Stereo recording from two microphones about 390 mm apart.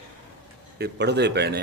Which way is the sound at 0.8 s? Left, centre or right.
Right.